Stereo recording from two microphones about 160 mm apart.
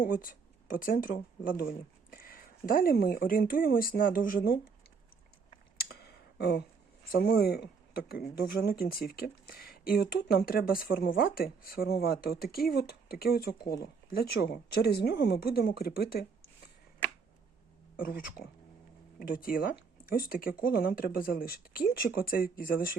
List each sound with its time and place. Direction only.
0.0 s speech: 60° left (ahead or behind)
5.7 s a sound: 80° left
7.1 s speech: 75° left (ahead or behind)
14.4 s speech: 85° left; by 16.2 s 70° left (ahead or behind)
17.9 s speech: 65° left (ahead or behind)